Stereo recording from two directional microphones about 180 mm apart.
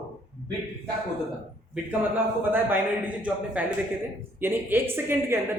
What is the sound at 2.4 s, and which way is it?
A woman's voice, 10° right (ahead or behind).